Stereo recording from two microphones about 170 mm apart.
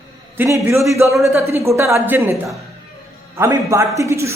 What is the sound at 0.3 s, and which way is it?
Speech, 15° right (ahead or behind).